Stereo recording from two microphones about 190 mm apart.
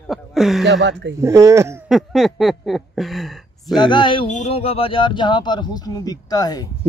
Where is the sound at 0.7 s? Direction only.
65° right (ahead or behind).